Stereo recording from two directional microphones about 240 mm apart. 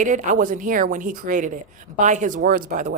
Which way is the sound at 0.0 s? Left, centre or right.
Right.